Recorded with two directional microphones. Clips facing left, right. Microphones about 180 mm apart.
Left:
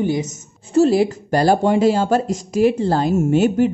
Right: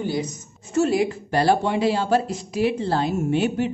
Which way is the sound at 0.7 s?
35° left (ahead or behind).